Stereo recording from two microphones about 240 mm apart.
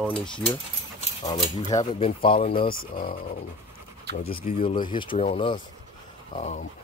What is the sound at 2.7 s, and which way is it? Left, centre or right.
Speech, left.